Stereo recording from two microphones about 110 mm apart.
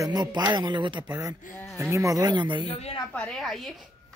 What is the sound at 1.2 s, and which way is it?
Speech, 30° right (ahead or behind).